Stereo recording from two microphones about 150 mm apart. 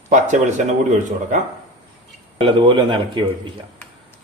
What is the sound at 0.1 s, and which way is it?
Speech, 55° right (ahead or behind).